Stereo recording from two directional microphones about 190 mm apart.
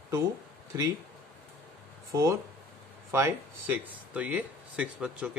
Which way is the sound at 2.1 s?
15° right (ahead or behind).